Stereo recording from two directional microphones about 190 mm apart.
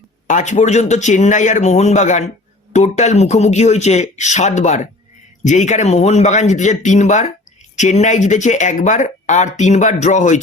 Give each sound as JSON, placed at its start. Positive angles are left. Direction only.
{"t": 0.3, "sound": "speech", "side_deg": 40}